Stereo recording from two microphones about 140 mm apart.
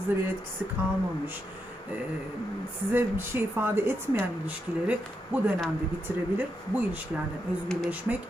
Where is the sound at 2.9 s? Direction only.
15° right (ahead or behind).